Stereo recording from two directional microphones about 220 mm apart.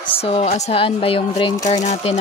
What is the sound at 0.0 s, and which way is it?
Speech, 25° left (ahead or behind).